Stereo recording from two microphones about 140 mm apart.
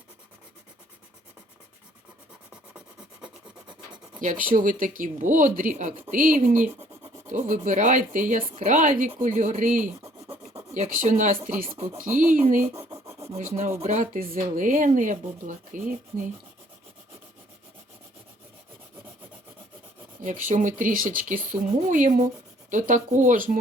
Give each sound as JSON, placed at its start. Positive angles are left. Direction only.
{"t": 3.2, "sound": "rub", "side_deg": -35}
{"t": 4.2, "sound": "speech", "side_deg": -70}
{"t": 10.0, "sound": "scratch", "side_deg": -15}
{"t": 10.8, "sound": "speech", "side_deg": -65}
{"t": 11.4, "sound": "speech", "side_deg": -85}
{"t": 12.5, "sound": "rub", "side_deg": -20}
{"t": 13.5, "sound": "speech", "side_deg": -55}
{"t": 20.5, "sound": "speech", "side_deg": -70}